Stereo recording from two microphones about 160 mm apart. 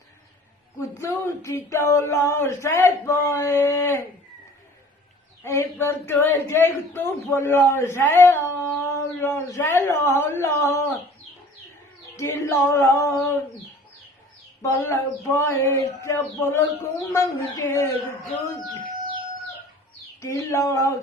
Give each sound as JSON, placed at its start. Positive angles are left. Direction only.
{"t": 0.8, "sound": "speech", "side_deg": 15}
{"t": 5.4, "sound": "speech", "side_deg": 15}
{"t": 12.1, "sound": "female singing", "side_deg": 15}
{"t": 14.6, "sound": "speech", "side_deg": 15}
{"t": 20.2, "sound": "speech", "side_deg": 20}